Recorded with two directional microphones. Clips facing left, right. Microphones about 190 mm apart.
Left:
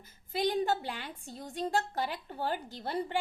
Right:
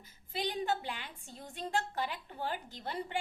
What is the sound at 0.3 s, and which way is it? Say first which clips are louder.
A woman's voice: left 5 dB; 40° left (ahead or behind).